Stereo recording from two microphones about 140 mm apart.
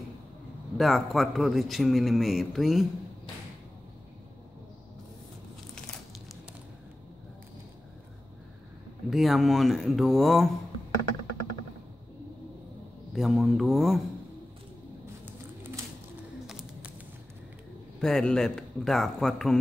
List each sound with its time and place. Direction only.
0.7 s speech: centre (ahead or behind)
9.1 s speech: centre (ahead or behind)
13.1 s speech: centre (ahead or behind)
15.2 s bird: 15° right (ahead or behind)
16.4 s a sound: 5° right (ahead or behind)
18.0 s speech: 5° left (ahead or behind)